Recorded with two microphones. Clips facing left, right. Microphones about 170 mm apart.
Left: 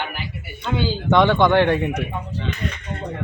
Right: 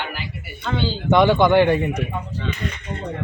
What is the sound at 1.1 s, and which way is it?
Speech, 5° right (ahead or behind).